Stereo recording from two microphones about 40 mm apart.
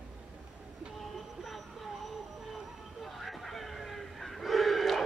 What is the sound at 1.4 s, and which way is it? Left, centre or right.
Vehicle, centre.